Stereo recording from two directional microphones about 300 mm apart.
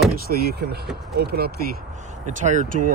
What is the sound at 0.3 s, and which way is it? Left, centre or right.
Speech, right.